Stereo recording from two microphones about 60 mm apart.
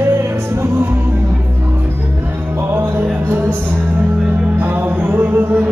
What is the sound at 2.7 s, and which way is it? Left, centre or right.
Music, right.